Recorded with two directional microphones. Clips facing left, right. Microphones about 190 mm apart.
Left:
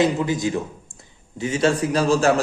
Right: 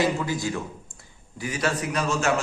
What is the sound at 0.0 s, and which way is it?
A man's voice, 20° left (ahead or behind).